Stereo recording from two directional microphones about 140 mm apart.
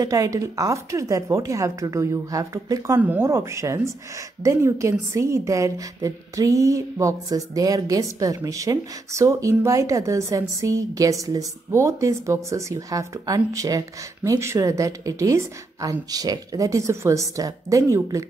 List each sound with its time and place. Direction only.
0.0 s a woman's voice: 25° right (ahead or behind)
3.0 s a woman's voice: 15° right (ahead or behind)